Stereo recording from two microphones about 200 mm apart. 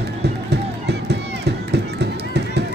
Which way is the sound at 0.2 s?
55° right (ahead or behind).